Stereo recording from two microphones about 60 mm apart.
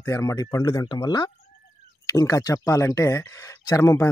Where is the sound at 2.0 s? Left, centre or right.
Left.